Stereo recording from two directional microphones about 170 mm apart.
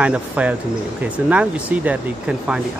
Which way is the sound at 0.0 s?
10° right (ahead or behind).